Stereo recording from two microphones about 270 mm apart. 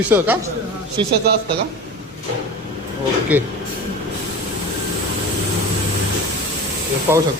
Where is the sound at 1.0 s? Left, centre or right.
Centre.